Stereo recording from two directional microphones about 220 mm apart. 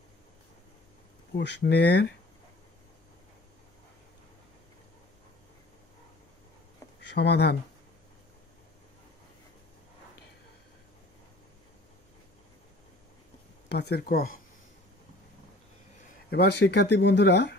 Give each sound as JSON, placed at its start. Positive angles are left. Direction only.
{"t": 1.3, "sound": "speech", "side_deg": 50}
{"t": 7.2, "sound": "speech", "side_deg": 50}
{"t": 13.7, "sound": "speech", "side_deg": 50}
{"t": 16.3, "sound": "speech", "side_deg": 45}